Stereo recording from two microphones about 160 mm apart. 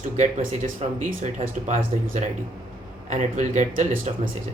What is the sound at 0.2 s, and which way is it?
Speech, 50° right (ahead or behind).